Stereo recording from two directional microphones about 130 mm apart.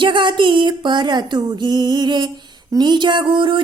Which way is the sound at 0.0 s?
40° right (ahead or behind).